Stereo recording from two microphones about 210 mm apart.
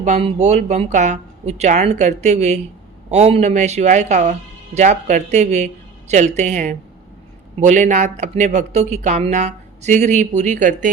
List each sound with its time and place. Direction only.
0.0 s speech: 30° right (ahead or behind)